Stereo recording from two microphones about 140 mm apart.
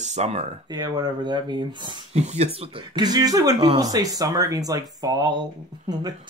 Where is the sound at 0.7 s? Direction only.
30° right (ahead or behind).